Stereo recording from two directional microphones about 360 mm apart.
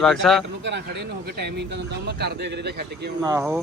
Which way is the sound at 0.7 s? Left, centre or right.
Right.